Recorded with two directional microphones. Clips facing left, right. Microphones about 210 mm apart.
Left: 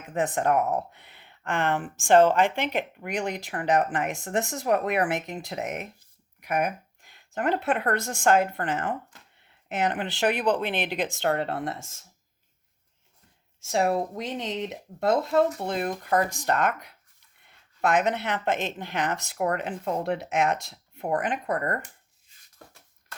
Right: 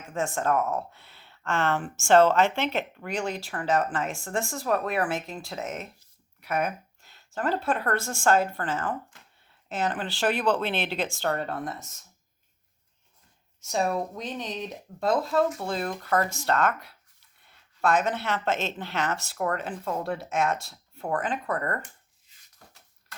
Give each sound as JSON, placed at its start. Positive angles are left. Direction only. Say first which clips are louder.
{"t": 0.1, "sound": "speech", "louder": "left 2 dB", "side_deg": 20}
{"t": 13.6, "sound": "speech", "louder": "left 3 dB", "side_deg": 25}